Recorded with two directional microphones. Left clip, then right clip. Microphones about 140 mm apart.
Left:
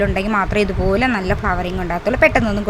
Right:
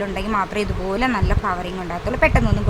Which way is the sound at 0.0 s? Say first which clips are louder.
Left 4 dB; 30° left (ahead or behind).